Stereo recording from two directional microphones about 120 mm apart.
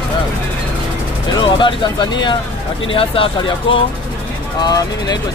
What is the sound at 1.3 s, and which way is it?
Vehicle, 40° left (ahead or behind).